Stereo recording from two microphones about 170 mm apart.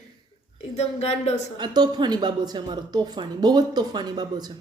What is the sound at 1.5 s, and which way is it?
Speech, 25° right (ahead or behind).